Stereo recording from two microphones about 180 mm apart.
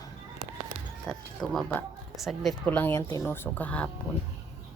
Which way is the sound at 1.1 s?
Centre (ahead or behind).